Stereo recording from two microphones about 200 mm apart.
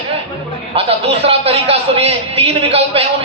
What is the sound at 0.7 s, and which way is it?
A man's voice, 30° right (ahead or behind).